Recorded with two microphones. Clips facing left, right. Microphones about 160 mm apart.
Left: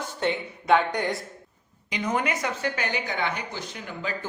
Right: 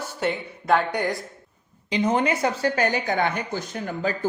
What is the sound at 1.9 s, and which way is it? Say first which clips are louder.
A woman's voice: right 5 dB; 30° right (ahead or behind).